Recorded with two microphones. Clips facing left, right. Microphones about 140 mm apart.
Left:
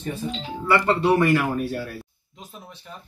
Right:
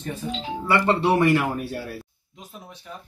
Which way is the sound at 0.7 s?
25° right (ahead or behind).